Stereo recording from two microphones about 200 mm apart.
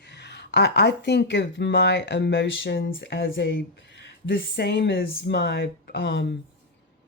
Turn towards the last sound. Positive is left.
turn(degrees=60)  # may be behind; listen again after turning